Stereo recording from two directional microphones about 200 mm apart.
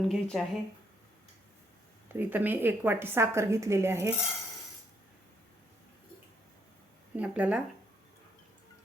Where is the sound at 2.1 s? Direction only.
10° right (ahead or behind).